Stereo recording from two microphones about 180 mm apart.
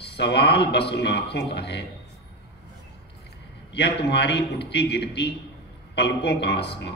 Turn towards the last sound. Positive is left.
turn(degrees=70)  # may be behind; listen again after turning